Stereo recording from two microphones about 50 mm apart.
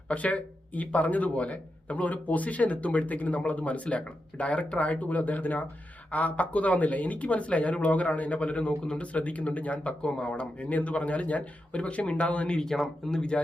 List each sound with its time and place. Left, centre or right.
0.1 s speech: left
12.5 s speech: centre